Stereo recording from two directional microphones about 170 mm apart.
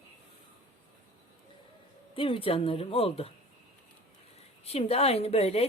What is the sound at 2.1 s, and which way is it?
A woman's voice, 30° left (ahead or behind).